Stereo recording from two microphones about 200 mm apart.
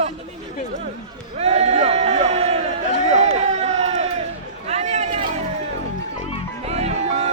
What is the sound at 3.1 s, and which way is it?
Run, 35° right (ahead or behind).